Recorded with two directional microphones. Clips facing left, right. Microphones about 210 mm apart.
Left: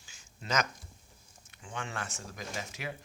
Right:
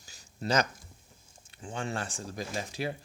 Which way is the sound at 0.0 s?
35° right (ahead or behind).